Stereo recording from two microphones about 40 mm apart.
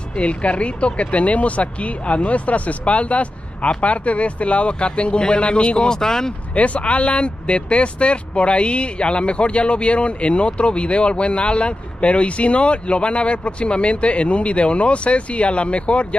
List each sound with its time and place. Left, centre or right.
0.1 s speech: left; by 6.3 s centre
6.5 s speech: left